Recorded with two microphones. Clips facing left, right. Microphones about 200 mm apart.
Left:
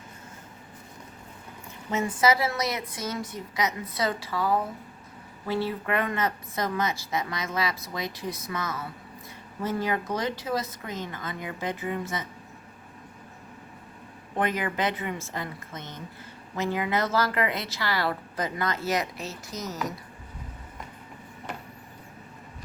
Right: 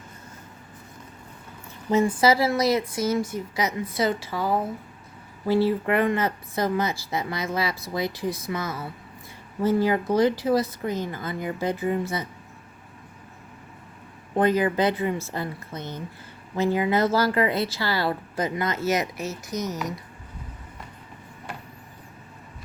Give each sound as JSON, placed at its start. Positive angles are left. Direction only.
{"t": 1.9, "sound": "a woman's voice", "side_deg": -30}
{"t": 14.3, "sound": "a woman's voice", "side_deg": -35}
{"t": 19.5, "sound": "speech", "side_deg": 0}